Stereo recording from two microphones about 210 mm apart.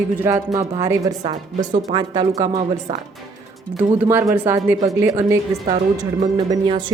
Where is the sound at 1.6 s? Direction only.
35° right (ahead or behind).